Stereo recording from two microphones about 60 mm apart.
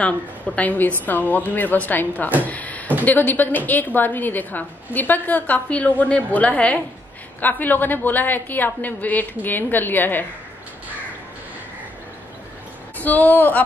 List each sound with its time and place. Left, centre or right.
0.6 s a woman's voice: left
2.4 s a sound: left
3.1 s a woman's voice: left
13.0 s a woman's voice: left